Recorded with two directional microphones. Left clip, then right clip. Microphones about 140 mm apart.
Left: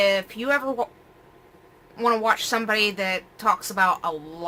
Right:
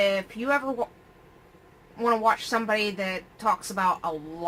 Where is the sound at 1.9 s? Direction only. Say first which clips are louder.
Left 2 dB; 20° left (ahead or behind).